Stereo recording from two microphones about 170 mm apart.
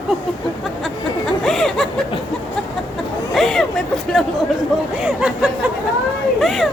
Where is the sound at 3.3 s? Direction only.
Centre (ahead or behind).